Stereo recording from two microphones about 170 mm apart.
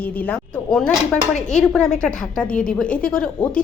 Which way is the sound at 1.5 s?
5° left (ahead or behind).